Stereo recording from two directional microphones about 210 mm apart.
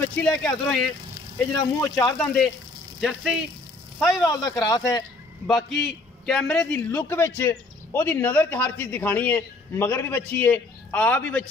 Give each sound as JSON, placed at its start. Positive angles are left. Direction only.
{"t": 0.2, "sound": "a man's voice", "side_deg": 5}
{"t": 1.6, "sound": "a man's voice", "side_deg": 15}
{"t": 2.1, "sound": "a man's voice", "side_deg": 0}
{"t": 4.3, "sound": "a man's voice", "side_deg": 20}
{"t": 5.7, "sound": "a man's voice", "side_deg": 0}